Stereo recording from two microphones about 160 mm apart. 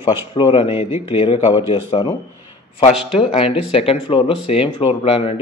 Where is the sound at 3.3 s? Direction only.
35° left (ahead or behind).